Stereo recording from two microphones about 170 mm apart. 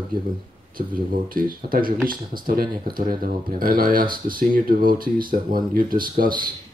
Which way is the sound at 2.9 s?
55° right (ahead or behind).